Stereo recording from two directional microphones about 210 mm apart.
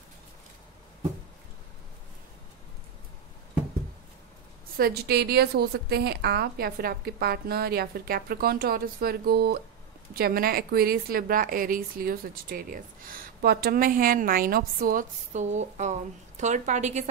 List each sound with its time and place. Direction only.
4.7 s a woman's voice: 45° right (ahead or behind)